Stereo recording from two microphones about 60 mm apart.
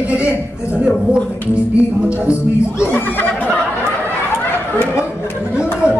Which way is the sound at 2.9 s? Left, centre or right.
Left.